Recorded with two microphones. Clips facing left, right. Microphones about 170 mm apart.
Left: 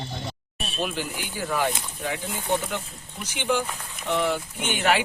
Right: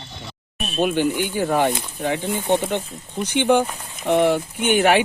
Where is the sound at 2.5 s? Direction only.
65° right (ahead or behind).